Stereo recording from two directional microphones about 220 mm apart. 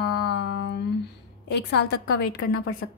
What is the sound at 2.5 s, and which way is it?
Speech, 75° left (ahead or behind).